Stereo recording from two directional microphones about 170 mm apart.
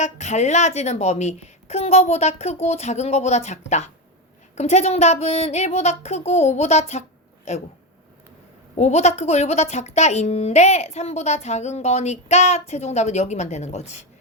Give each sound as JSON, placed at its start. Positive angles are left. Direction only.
{"t": 0.0, "sound": "speech", "side_deg": 45}
{"t": 8.7, "sound": "speech", "side_deg": 40}